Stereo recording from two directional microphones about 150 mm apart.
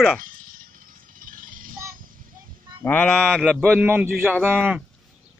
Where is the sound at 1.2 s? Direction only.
65° right (ahead or behind).